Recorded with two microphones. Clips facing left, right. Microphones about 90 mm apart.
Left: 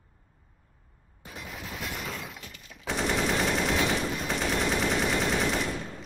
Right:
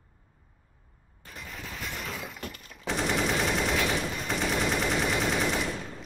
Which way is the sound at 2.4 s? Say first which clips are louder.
Right 7 dB; 50° right (ahead or behind).